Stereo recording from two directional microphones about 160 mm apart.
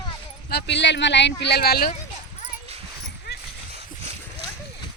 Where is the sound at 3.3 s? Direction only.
90° left.